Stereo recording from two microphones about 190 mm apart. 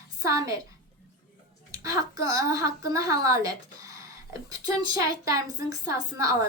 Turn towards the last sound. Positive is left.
turn(degrees=-15)  # may be behind; listen again after turning